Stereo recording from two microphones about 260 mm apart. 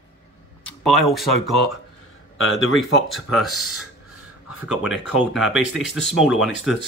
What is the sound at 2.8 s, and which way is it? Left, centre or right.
Speech, centre.